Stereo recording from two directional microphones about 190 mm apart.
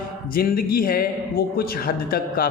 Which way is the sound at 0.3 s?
50° left (ahead or behind).